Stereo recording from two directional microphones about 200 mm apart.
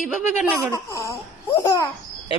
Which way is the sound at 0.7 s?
15° left (ahead or behind).